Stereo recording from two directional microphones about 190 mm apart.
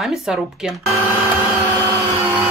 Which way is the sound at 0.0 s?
Centre (ahead or behind).